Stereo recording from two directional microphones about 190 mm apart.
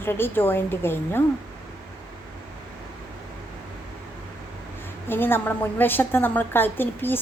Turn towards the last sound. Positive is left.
turn(degrees=10)  # may be behind; listen again after turning